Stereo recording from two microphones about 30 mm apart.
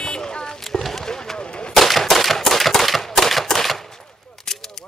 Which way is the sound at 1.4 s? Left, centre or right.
Left.